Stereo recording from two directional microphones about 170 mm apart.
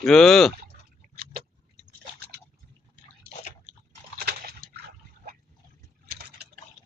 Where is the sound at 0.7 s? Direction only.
65° right (ahead or behind).